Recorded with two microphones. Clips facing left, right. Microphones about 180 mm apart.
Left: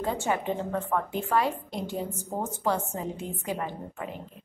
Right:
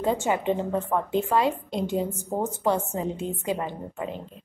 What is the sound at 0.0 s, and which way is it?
A woman's voice, 20° right (ahead or behind).